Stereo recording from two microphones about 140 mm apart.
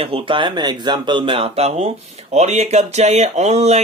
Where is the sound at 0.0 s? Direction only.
40° right (ahead or behind).